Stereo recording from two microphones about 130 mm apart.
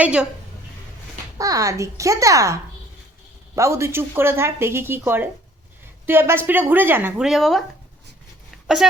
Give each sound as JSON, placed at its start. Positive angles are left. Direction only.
{"t": 0.0, "sound": "a woman's voice", "side_deg": -10}
{"t": 1.4, "sound": "a woman's voice", "side_deg": -25}
{"t": 7.2, "sound": "speech", "side_deg": 0}
{"t": 8.4, "sound": "a sound", "side_deg": 0}